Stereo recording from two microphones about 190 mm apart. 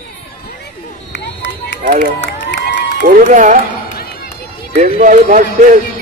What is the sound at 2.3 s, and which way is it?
Crowd, 70° left (ahead or behind).